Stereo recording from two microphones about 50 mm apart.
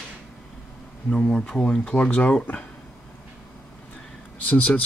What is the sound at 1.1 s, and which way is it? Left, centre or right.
Speech, centre.